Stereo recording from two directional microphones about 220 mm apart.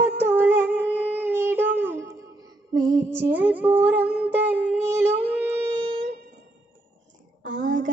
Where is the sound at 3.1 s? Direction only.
10° right (ahead or behind).